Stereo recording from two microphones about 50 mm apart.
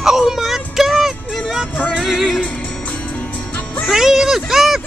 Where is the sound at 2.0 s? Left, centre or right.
Centre.